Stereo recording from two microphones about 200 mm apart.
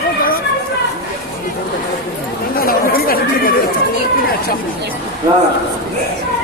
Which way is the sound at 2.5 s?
45° left (ahead or behind).